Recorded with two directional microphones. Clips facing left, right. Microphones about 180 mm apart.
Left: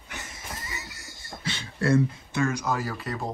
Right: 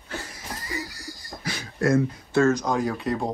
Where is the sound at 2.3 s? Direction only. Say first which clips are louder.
Right 6 dB; 15° left (ahead or behind).